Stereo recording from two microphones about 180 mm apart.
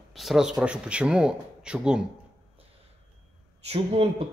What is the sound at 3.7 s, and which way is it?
Speech, 35° right (ahead or behind).